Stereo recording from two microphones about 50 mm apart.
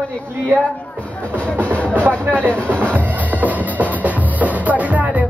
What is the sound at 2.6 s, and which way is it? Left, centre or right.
Music, right.